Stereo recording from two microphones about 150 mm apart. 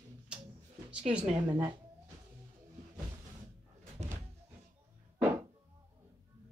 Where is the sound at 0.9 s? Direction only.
5° right (ahead or behind).